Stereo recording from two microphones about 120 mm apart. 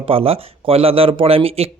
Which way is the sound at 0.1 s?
50° right (ahead or behind).